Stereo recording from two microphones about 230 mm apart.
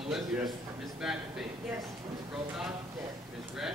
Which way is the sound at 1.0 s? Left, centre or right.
Centre.